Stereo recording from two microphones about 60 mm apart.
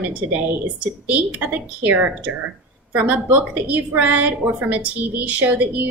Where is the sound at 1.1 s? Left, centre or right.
Right.